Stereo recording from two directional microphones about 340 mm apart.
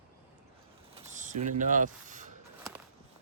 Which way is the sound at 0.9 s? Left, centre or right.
Right.